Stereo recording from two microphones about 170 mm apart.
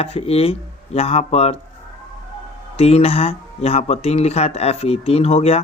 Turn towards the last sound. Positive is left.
turn(degrees=35)  # may be behind; listen again after turning